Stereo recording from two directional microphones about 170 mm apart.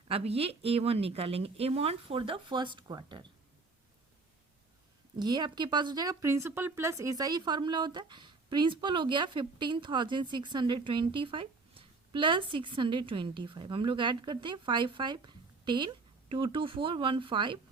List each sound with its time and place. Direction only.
0.1 s speech: 35° right (ahead or behind)
5.2 s speech: 25° right (ahead or behind)